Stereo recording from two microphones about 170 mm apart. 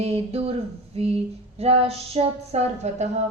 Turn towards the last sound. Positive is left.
turn(degrees=-40)  # may be behind; listen again after turning